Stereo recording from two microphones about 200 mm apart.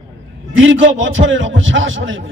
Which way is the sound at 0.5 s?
75° right (ahead or behind).